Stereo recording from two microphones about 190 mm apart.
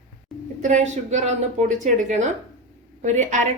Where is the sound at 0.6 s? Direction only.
40° right (ahead or behind).